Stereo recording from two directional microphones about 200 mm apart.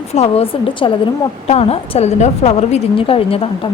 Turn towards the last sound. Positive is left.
turn(degrees=30)  # may be behind; listen again after turning